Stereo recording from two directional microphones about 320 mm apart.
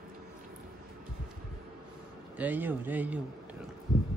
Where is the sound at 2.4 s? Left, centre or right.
Centre.